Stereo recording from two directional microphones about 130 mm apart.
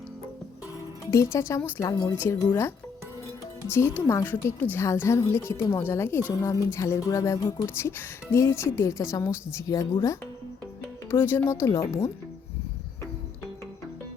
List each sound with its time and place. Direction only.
1.1 s a woman's voice: 25° left (ahead or behind)